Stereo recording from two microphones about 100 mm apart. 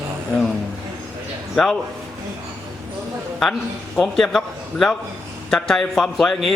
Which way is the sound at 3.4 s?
5° left (ahead or behind).